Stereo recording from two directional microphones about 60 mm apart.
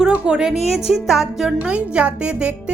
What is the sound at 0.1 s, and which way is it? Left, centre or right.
Speech, centre.